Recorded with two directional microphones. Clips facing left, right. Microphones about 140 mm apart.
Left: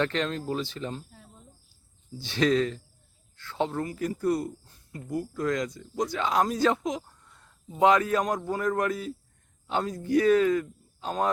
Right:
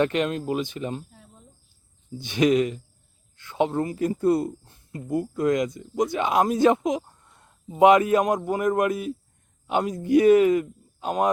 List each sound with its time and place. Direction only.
0.0 s speech: 15° right (ahead or behind)
2.2 s speech: 15° right (ahead or behind)